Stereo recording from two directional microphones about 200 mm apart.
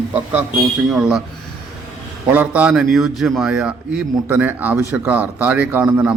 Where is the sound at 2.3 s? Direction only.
10° right (ahead or behind).